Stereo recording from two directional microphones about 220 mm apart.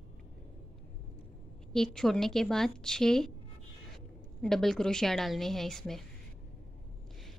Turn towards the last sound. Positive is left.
turn(degrees=0)  # may be behind; listen again after turning